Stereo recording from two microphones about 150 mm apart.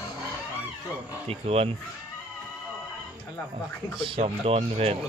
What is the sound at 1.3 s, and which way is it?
Speech, 40° right (ahead or behind).